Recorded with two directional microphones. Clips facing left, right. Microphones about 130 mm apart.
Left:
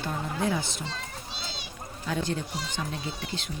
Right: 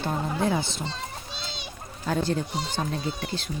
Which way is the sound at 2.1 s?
40° right (ahead or behind).